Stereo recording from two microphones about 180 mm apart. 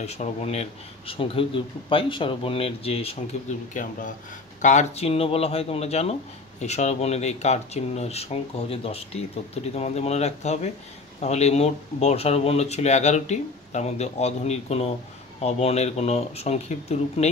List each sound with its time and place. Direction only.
0.0 s speech: 35° left (ahead or behind)